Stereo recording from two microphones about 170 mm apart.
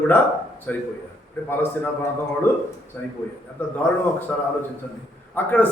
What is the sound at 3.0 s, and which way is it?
Speech, 10° left (ahead or behind).